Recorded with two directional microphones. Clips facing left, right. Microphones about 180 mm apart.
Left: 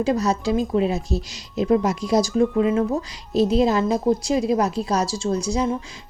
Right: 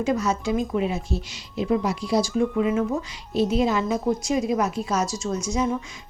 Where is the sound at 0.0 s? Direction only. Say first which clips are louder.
Left 3 dB; 35° left (ahead or behind).